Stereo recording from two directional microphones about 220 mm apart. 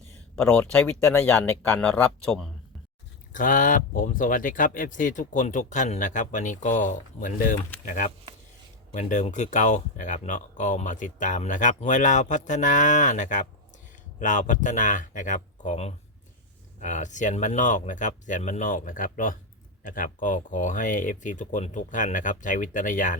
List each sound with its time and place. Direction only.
0.4 s speech: 10° left (ahead or behind)
3.3 s speech: 35° left (ahead or behind)